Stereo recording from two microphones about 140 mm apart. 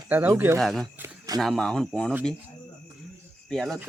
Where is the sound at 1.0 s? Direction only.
25° right (ahead or behind).